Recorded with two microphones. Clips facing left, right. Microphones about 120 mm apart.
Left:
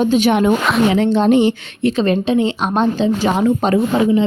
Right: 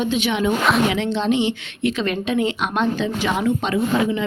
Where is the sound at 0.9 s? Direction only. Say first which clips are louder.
Left 7 dB; 40° left (ahead or behind).